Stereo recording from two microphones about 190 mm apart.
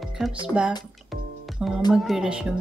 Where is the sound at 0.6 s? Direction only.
5° right (ahead or behind).